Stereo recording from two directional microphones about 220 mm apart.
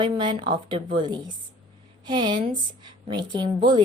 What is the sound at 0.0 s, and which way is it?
Speech, 20° right (ahead or behind).